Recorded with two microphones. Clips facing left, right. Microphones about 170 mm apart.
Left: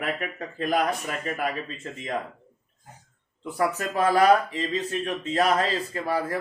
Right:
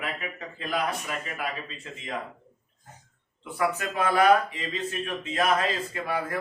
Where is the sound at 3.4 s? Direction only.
40° left (ahead or behind).